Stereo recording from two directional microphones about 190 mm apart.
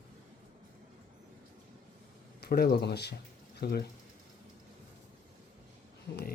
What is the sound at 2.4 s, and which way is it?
Speech, 55° left (ahead or behind).